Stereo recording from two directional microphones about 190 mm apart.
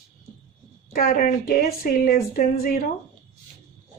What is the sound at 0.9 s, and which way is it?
A woman's voice, 50° left (ahead or behind).